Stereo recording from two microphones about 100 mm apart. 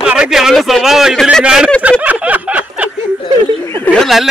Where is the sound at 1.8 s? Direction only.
15° right (ahead or behind).